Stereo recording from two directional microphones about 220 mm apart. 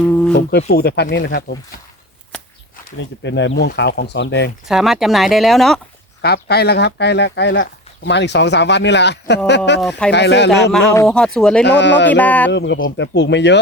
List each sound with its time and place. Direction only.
0.0 s speech: 5° left (ahead or behind)
0.3 s speech: 45° left (ahead or behind)
3.0 s speech: 55° left (ahead or behind)
4.6 s speech: centre (ahead or behind)
6.2 s speech: 45° left (ahead or behind)
10.9 s speech: 10° left (ahead or behind)
11.6 s speech: 50° left (ahead or behind)
12.1 s speech: 5° left (ahead or behind)
12.5 s speech: 55° left (ahead or behind)